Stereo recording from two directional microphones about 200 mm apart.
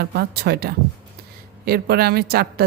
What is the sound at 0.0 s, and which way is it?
Speech, 50° right (ahead or behind).